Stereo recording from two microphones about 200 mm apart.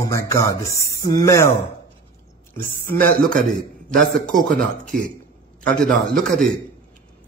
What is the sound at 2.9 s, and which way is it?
A man's voice, 10° left (ahead or behind).